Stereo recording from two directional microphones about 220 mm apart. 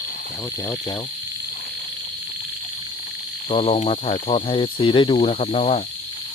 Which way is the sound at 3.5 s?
25° left (ahead or behind).